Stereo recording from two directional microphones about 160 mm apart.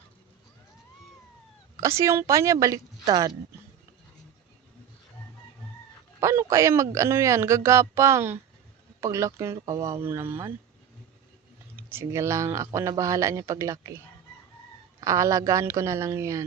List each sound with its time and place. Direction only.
1.7 s speech: 20° right (ahead or behind)
6.1 s speech: 20° right (ahead or behind)
11.8 s speech: 15° right (ahead or behind)
15.0 s speech: 20° right (ahead or behind)